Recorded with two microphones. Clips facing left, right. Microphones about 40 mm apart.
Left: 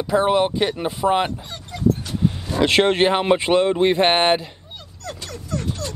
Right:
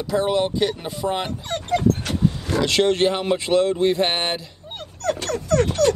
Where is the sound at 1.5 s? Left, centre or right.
Right.